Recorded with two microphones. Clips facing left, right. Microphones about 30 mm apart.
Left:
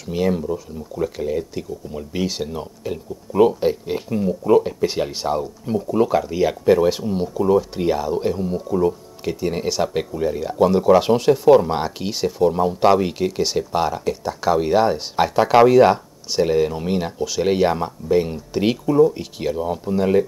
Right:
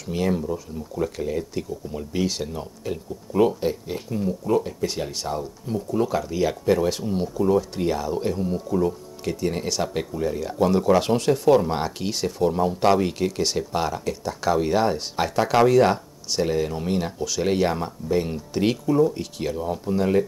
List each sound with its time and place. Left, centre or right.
0.0 s speech: centre
3.8 s speech: centre